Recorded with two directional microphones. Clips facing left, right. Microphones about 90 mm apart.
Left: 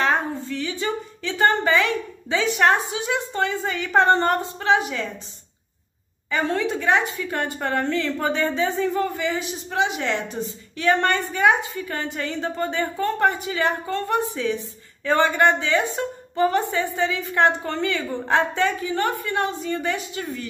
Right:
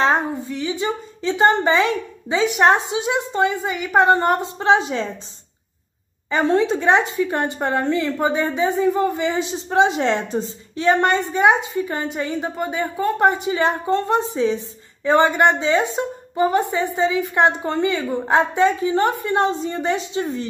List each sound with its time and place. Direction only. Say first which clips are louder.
0.5 s speech: right 3 dB; 20° right (ahead or behind)
6.3 s speech: right 5 dB; 25° right (ahead or behind)